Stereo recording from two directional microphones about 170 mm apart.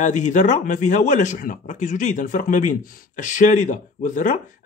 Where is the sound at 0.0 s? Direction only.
45° left (ahead or behind).